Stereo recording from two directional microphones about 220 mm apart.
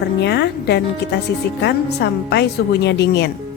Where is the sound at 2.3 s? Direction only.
50° left (ahead or behind).